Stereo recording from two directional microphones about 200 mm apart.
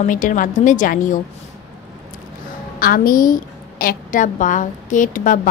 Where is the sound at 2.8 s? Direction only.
45° left (ahead or behind).